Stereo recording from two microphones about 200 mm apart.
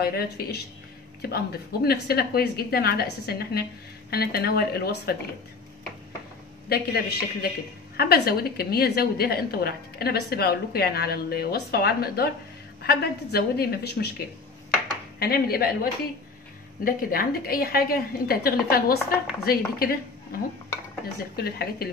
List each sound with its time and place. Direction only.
0.0 s a woman's voice: 50° left (ahead or behind)
6.7 s a woman's voice: 50° left (ahead or behind)
21.4 s a woman's voice: 50° left (ahead or behind)